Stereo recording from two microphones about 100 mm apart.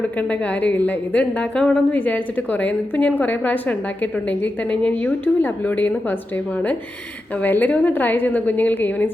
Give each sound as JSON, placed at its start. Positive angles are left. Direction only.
{"t": 0.2, "sound": "a woman's voice", "side_deg": 15}